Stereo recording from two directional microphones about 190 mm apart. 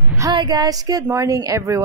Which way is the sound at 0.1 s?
20° right (ahead or behind).